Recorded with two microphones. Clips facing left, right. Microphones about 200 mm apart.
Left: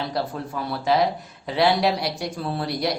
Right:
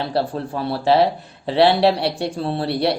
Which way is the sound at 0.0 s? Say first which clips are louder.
Right 5 dB; 30° right (ahead or behind).